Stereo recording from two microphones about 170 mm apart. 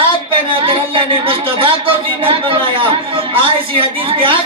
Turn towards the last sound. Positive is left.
turn(degrees=-30)  # may be behind; listen again after turning